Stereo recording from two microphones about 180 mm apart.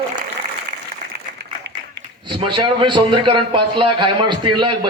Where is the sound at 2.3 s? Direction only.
25° right (ahead or behind).